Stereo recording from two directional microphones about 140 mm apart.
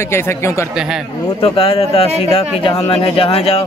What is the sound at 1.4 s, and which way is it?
Speech, 40° left (ahead or behind).